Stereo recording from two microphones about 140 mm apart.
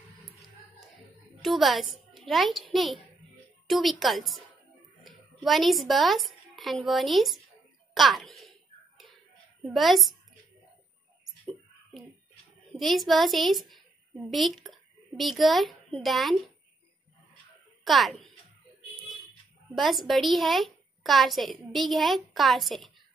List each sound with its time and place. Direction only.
1.4 s a child's voice: centre (ahead or behind)
7.9 s a sound: centre (ahead or behind)
9.6 s a woman's voice: centre (ahead or behind)
12.7 s a woman's voice: centre (ahead or behind)
17.8 s a child's voice: centre (ahead or behind)
19.7 s a woman's voice: centre (ahead or behind)